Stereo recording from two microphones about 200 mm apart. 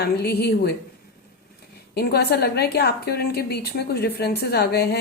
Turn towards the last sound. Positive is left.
turn(degrees=50)  # may be behind; listen again after turning